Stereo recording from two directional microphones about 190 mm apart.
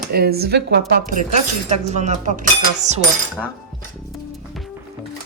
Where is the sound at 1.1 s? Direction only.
40° right (ahead or behind).